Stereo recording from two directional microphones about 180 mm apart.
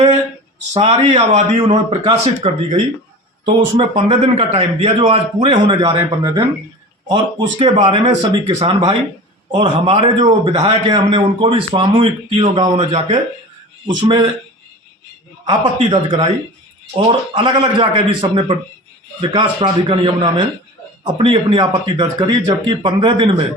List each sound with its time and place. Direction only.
0.7 s a man's voice: 30° right (ahead or behind)
15.9 s a man's voice: 25° right (ahead or behind)